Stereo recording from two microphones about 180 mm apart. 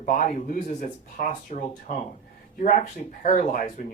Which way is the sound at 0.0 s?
50° left (ahead or behind).